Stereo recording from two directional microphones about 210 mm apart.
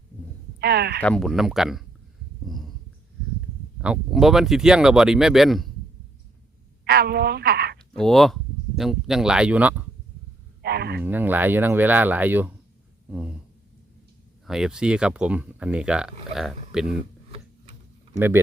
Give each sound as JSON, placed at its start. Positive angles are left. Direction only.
{"t": 0.6, "sound": "speech", "side_deg": -50}
{"t": 1.0, "sound": "speech", "side_deg": 5}
{"t": 3.8, "sound": "speech", "side_deg": -5}
{"t": 6.8, "sound": "speech", "side_deg": -45}
{"t": 7.9, "sound": "speech", "side_deg": 0}
{"t": 10.6, "sound": "a sound", "side_deg": -50}
{"t": 11.0, "sound": "speech", "side_deg": -10}
{"t": 13.1, "sound": "a sound", "side_deg": -5}
{"t": 14.4, "sound": "speech", "side_deg": 0}